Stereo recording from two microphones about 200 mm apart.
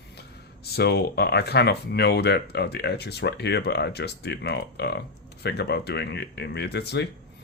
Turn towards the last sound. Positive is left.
turn(degrees=55)  # may be behind; listen again after turning